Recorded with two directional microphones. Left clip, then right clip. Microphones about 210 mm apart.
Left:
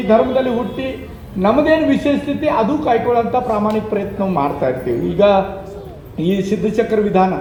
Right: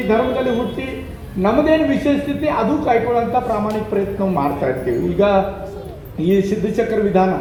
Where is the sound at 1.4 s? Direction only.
35° left (ahead or behind).